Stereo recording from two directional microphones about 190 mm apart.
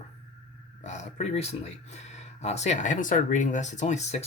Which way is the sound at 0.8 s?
35° left (ahead or behind).